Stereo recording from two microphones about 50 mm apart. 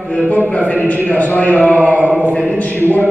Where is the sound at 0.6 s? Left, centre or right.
Left.